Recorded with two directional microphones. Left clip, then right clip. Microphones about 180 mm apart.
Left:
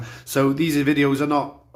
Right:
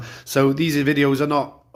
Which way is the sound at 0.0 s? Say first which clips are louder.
Right 2 dB; 30° right (ahead or behind).